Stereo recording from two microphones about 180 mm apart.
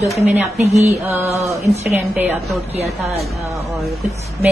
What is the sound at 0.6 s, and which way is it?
Music, 35° right (ahead or behind).